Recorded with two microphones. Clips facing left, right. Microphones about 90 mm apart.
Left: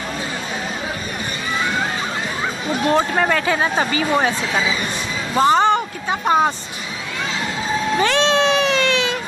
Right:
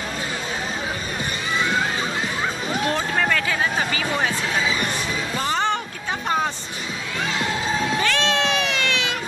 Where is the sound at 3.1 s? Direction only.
30° left (ahead or behind).